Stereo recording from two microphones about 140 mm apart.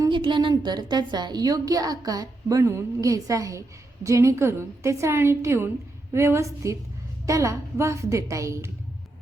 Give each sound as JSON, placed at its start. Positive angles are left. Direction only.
{"t": 0.1, "sound": "a woman's voice", "side_deg": -35}